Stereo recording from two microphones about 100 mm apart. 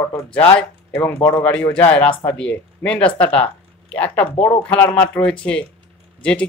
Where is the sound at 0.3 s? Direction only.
15° left (ahead or behind).